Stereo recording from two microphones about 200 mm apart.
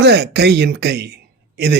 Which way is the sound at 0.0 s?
55° right (ahead or behind).